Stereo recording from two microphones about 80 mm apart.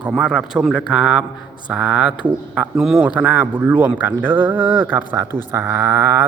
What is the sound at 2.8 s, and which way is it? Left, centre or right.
Speech, centre.